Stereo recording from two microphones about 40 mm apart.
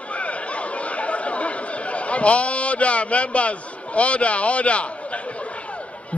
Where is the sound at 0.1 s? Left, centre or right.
Left.